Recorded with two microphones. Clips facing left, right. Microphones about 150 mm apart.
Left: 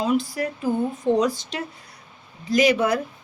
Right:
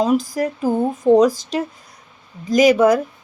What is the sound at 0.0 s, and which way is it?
Speech, 40° right (ahead or behind).